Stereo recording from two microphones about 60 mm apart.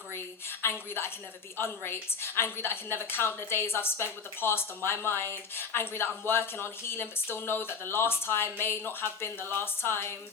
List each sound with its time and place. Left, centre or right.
0.6 s a woman's voice: left